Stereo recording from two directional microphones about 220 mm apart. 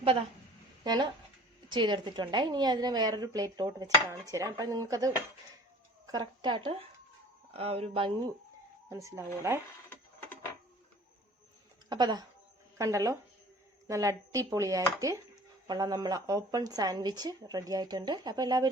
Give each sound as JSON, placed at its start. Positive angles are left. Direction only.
{"t": 0.9, "sound": "a woman's voice", "side_deg": -20}
{"t": 8.9, "sound": "a woman's voice", "side_deg": -15}
{"t": 11.9, "sound": "a woman's voice", "side_deg": -20}